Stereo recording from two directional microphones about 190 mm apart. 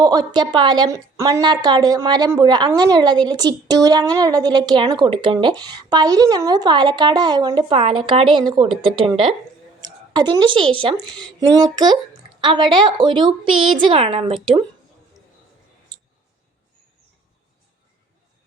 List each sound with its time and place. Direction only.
0.0 s a woman's voice: 20° right (ahead or behind)